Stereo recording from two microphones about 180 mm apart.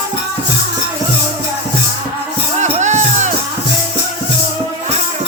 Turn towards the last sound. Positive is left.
turn(degrees=-40)  # may be behind; listen again after turning